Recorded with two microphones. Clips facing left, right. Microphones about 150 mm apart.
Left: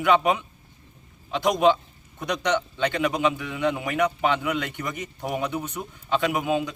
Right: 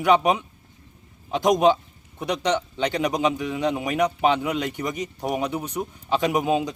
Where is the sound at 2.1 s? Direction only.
30° right (ahead or behind).